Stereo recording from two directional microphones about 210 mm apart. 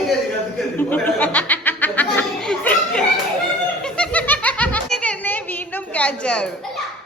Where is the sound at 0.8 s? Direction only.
10° left (ahead or behind).